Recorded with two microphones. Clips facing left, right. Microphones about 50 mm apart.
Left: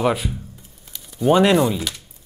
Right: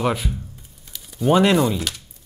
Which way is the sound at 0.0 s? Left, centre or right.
Centre.